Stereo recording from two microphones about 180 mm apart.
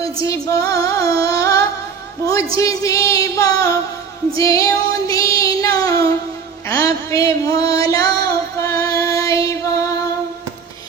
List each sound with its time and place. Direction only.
0.0 s female singing: 20° left (ahead or behind)
4.4 s music: 20° left (ahead or behind)
5.4 s child singing: 20° left (ahead or behind)
6.7 s music: 15° left (ahead or behind)